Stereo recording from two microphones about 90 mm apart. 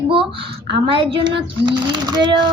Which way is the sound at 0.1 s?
80° right.